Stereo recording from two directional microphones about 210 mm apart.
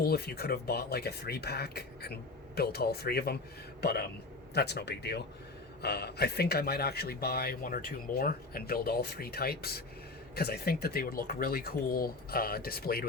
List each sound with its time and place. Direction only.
0.0 s speech: 50° left (ahead or behind)